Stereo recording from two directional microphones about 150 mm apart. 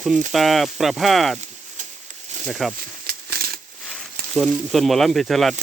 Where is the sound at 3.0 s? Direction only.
90° right.